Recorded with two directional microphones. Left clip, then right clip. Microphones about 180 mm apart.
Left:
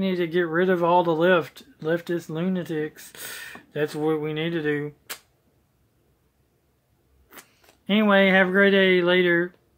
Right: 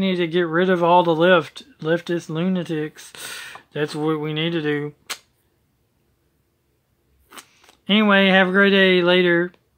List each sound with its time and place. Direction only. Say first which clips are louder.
0.0 s speech: right 3 dB; 35° right (ahead or behind)
7.2 s speech: right 5 dB; 30° right (ahead or behind)